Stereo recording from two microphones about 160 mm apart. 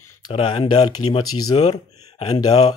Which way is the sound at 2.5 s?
40° left (ahead or behind).